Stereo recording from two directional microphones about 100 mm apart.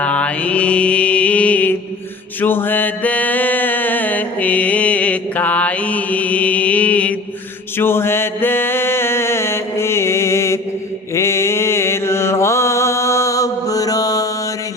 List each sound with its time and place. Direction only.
0.0 s mantra: 15° left (ahead or behind)
7.8 s music: 25° left (ahead or behind)
11.1 s mantra: 25° left (ahead or behind)